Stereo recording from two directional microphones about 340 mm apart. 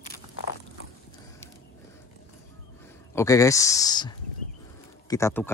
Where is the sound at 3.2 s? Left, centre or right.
Centre.